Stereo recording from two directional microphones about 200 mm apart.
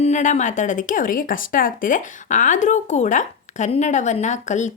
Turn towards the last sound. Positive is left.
turn(degrees=35)  # may be behind; listen again after turning